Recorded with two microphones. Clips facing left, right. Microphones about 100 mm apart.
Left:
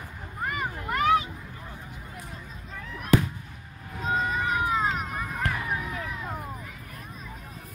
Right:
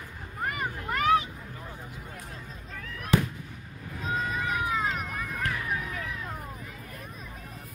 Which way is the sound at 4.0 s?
30° left (ahead or behind).